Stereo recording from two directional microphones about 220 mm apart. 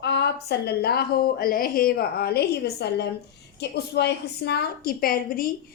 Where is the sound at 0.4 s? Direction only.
45° left (ahead or behind).